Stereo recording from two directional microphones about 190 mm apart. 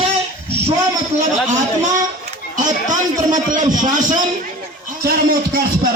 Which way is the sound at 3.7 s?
40° right (ahead or behind).